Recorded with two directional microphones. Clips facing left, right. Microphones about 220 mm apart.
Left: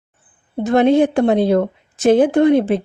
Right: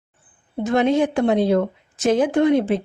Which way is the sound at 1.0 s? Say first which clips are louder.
Left 4 dB; 35° left (ahead or behind).